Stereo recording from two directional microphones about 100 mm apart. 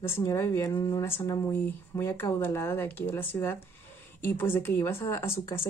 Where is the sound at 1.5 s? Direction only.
20° left (ahead or behind).